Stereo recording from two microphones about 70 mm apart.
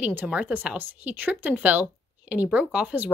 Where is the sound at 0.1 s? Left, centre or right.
Right.